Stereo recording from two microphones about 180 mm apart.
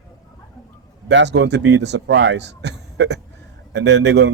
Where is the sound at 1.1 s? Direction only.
80° right.